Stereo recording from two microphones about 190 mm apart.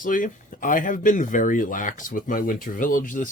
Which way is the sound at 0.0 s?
45° left (ahead or behind).